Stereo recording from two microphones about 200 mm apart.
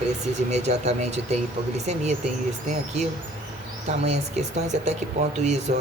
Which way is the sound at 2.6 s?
35° right (ahead or behind).